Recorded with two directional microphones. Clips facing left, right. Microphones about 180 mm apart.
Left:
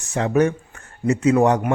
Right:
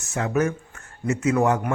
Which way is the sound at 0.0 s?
35° left (ahead or behind).